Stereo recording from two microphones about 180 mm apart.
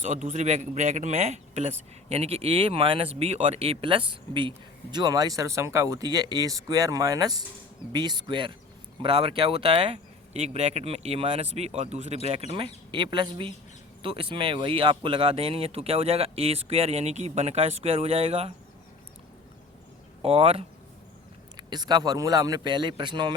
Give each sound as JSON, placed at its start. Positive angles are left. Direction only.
{"t": 0.0, "sound": "speech", "side_deg": -40}
{"t": 20.2, "sound": "speech", "side_deg": -35}